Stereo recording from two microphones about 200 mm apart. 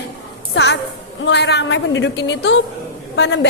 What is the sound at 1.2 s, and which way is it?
A woman's voice, 60° left (ahead or behind).